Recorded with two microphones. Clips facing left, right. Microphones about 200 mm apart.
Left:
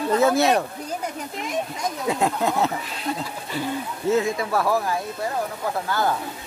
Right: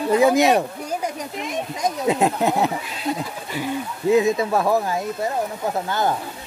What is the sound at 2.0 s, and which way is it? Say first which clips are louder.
Speech: right 3 dB; 20° right (ahead or behind).